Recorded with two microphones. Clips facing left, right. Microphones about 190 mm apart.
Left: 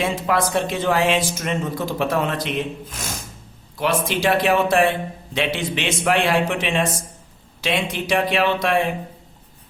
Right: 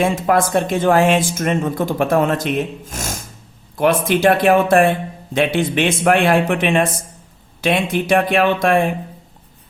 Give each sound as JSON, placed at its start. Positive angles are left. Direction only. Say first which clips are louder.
{"t": 0.0, "sound": "speech", "louder": "right 5 dB", "side_deg": -50}